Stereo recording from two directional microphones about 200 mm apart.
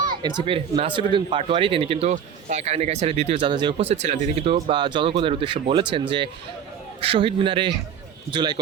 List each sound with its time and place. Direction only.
0.2 s a man's voice: 20° right (ahead or behind)